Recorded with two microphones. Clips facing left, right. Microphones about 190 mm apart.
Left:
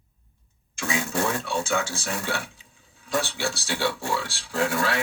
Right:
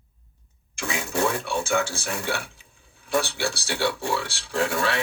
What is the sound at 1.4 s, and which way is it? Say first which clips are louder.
Speech: right 2 dB; 60° right (ahead or behind).